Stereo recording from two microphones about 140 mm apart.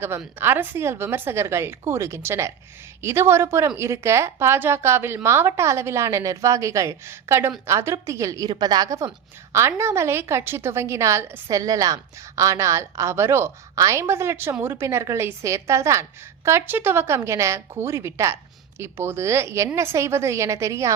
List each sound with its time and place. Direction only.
0.3 s a woman's voice: 15° right (ahead or behind)